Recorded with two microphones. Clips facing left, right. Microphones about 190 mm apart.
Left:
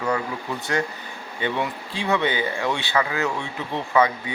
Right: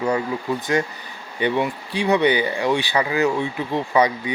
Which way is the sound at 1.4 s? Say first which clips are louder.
Right 5 dB; 15° right (ahead or behind).